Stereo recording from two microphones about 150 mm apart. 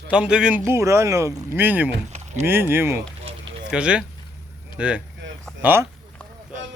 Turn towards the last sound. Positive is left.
turn(degrees=-15)  # may be behind; listen again after turning